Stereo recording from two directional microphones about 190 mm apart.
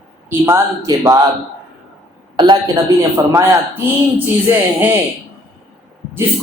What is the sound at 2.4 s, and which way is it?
Speech, 20° right (ahead or behind).